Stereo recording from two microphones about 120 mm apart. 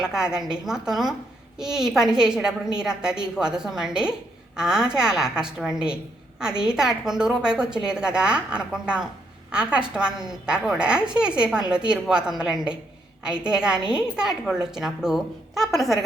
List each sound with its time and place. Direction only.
0.0 s a woman's voice: 5° right (ahead or behind)